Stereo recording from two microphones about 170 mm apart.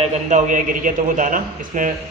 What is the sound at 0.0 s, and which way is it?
A man's voice, 45° right (ahead or behind).